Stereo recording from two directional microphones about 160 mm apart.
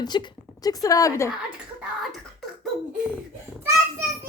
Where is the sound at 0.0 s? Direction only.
25° left (ahead or behind).